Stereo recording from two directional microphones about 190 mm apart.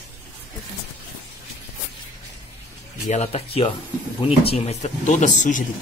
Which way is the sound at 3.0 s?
35° left (ahead or behind).